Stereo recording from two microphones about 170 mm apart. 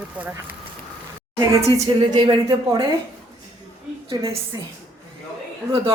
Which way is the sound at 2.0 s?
25° right (ahead or behind).